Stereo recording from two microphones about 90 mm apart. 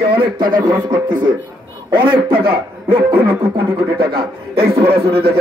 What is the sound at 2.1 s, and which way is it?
A man's voice, 75° right (ahead or behind).